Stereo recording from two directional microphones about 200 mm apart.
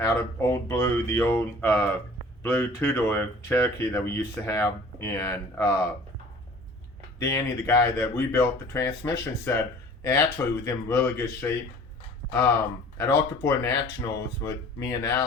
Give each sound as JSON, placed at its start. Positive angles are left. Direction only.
{"t": 0.0, "sound": "speech", "side_deg": 15}
{"t": 7.2, "sound": "speech", "side_deg": 15}
{"t": 13.0, "sound": "speech", "side_deg": 15}